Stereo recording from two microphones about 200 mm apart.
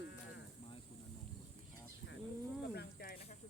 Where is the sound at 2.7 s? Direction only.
50° left (ahead or behind).